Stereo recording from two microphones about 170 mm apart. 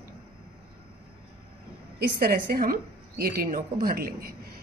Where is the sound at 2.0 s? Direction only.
60° right (ahead or behind).